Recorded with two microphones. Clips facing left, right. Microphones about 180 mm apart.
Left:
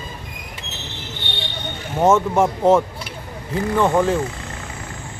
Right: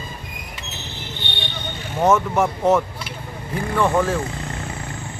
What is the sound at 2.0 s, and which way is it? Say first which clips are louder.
Speech: left 2 dB; 25° left (ahead or behind).